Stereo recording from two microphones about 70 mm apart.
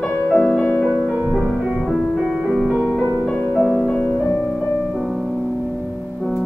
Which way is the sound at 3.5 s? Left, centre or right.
Centre.